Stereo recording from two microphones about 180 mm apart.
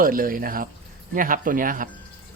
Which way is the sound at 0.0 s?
50° right (ahead or behind).